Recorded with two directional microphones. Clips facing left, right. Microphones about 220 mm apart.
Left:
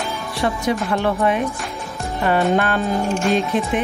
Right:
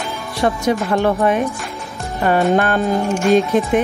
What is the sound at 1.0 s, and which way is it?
Speech, 45° right (ahead or behind).